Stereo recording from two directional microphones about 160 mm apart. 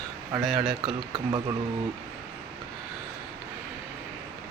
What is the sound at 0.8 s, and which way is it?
Speech, 30° right (ahead or behind).